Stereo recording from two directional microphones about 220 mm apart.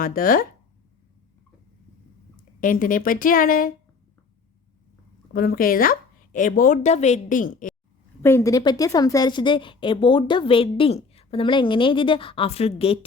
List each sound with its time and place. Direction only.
0.0 s a woman's voice: 40° left (ahead or behind)
2.6 s a woman's voice: 40° left (ahead or behind)
5.3 s a woman's voice: 40° left (ahead or behind)
8.2 s a woman's voice: 10° left (ahead or behind)